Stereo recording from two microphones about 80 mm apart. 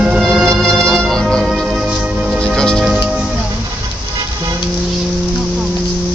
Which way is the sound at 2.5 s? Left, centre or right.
Centre.